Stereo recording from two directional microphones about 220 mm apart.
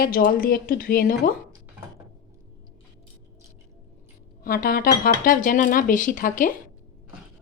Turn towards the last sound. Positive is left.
turn(degrees=35)  # may be behind; listen again after turning